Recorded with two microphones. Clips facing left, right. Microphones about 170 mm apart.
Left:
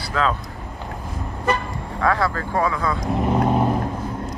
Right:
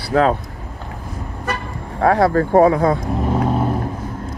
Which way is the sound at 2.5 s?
50° right (ahead or behind).